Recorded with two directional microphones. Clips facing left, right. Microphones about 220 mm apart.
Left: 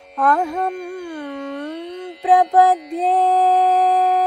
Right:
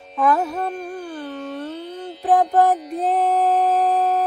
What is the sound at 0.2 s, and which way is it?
Mantra, 5° right (ahead or behind).